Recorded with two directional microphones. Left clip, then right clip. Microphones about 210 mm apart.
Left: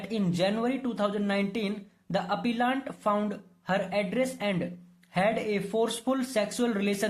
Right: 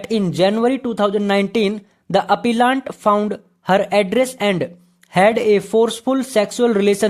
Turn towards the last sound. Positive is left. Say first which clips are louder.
# right 14 dB
turn(degrees=-45)  # may be behind; listen again after turning